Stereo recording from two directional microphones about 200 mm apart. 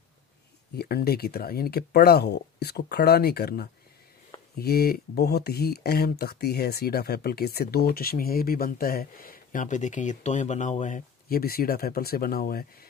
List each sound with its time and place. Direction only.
0.7 s speech: 50° left (ahead or behind)